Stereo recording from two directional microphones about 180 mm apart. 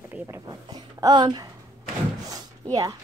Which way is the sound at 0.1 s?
10° right (ahead or behind).